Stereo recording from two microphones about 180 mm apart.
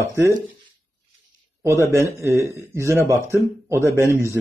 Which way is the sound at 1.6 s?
15° right (ahead or behind).